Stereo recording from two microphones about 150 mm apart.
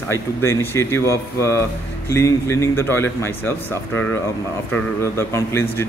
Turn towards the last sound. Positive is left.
turn(degrees=15)  # may be behind; listen again after turning